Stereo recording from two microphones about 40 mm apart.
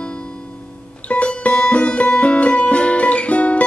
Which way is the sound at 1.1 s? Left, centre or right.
Left.